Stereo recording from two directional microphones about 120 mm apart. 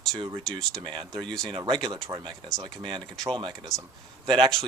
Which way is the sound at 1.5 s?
40° right (ahead or behind).